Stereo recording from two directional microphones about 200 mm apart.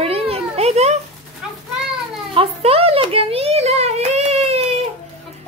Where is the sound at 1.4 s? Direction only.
5° right (ahead or behind).